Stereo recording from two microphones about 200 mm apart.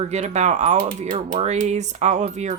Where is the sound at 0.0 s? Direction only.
35° right (ahead or behind).